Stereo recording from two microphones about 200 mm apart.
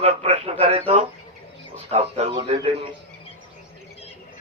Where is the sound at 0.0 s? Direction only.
30° right (ahead or behind).